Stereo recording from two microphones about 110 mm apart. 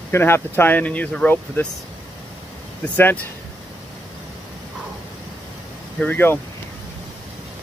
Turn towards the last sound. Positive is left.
turn(degrees=15)  # may be behind; listen again after turning